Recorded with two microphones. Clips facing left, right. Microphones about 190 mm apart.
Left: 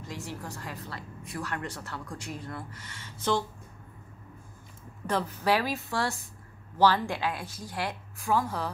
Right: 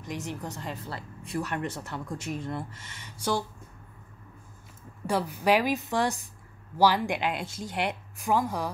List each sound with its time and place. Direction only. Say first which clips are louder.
0.0 s speech: right 3 dB; 20° right (ahead or behind)
5.0 s a woman's voice: right 2 dB; 10° right (ahead or behind)